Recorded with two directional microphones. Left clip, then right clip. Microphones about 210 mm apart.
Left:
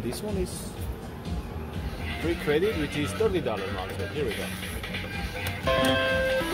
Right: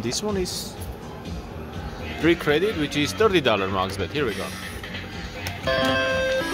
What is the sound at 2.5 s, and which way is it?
Speech, 20° right (ahead or behind).